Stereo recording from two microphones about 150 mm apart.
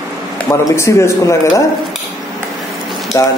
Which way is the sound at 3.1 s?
20° left (ahead or behind).